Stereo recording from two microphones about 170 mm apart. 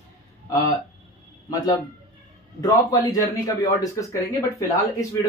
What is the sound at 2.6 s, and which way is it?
Speech, 20° left (ahead or behind).